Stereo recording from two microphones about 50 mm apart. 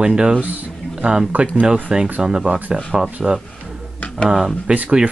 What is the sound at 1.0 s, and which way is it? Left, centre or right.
Speech, right.